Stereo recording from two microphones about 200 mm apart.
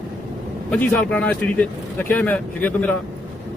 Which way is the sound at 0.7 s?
5° left (ahead or behind).